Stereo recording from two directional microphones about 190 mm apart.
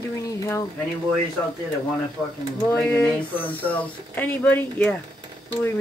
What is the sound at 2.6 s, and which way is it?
Speech, 5° left (ahead or behind).